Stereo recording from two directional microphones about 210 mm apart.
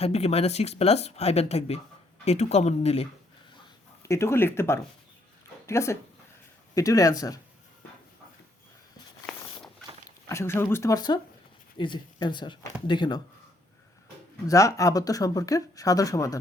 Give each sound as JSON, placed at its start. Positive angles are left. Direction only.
{"t": 0.0, "sound": "speech", "side_deg": 30}
{"t": 4.0, "sound": "speech", "side_deg": 15}
{"t": 10.2, "sound": "speech", "side_deg": 10}
{"t": 14.4, "sound": "speech", "side_deg": 15}